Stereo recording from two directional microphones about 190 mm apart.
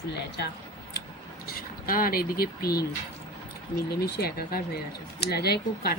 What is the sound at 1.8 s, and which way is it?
Speech, 50° left (ahead or behind).